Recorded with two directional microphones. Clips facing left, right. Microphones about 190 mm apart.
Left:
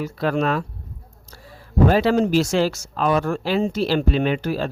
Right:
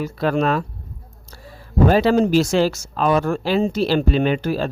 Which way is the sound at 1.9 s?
35° right (ahead or behind).